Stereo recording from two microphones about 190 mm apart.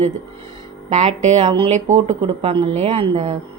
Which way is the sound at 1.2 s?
35° right (ahead or behind).